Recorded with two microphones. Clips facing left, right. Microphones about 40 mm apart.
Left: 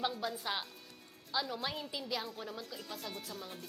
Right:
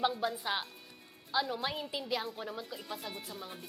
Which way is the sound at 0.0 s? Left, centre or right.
Centre.